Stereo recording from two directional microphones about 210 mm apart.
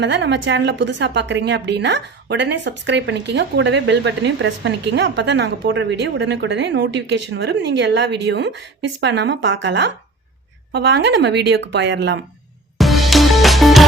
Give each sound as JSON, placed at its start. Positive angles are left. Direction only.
{"t": 0.0, "sound": "a woman's voice", "side_deg": -55}
{"t": 12.8, "sound": "music", "side_deg": 0}